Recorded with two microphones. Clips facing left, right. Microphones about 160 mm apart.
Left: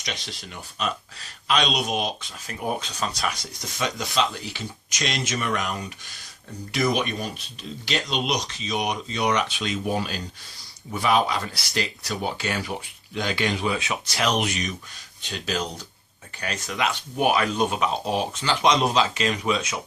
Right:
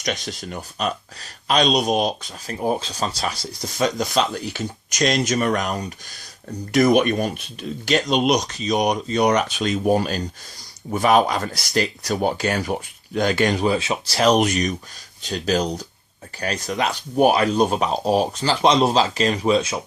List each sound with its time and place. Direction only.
0.0 s speech: 45° right (ahead or behind)